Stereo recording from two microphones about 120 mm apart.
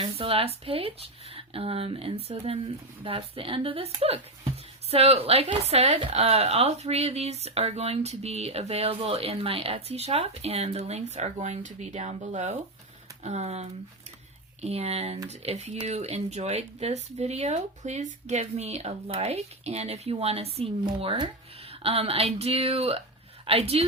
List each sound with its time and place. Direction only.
0.0 s a woman's voice: 50° right (ahead or behind)
20.8 s a woman's voice: 45° right (ahead or behind)